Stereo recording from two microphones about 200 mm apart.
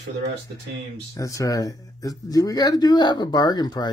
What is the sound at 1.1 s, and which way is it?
Speech, 15° left (ahead or behind).